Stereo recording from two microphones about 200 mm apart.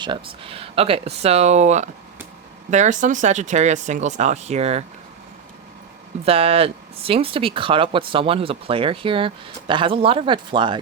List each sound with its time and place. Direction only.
0.0 s speech: 25° right (ahead or behind)
6.2 s speech: 30° right (ahead or behind)